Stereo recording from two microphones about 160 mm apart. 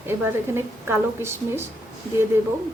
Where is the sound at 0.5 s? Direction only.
15° right (ahead or behind).